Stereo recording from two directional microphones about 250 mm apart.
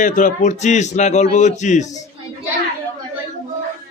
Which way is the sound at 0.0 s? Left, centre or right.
Left.